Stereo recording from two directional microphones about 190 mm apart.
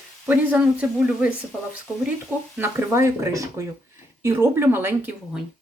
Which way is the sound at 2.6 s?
15° right (ahead or behind).